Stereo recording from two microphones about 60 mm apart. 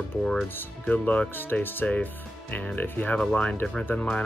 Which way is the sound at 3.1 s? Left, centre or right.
Left.